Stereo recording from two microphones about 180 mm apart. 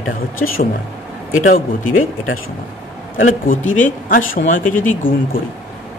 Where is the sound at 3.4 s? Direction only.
50° left (ahead or behind).